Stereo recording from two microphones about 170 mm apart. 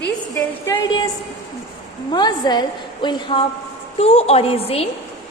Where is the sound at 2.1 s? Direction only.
25° left (ahead or behind).